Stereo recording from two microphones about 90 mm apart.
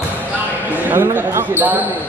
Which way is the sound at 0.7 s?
25° right (ahead or behind).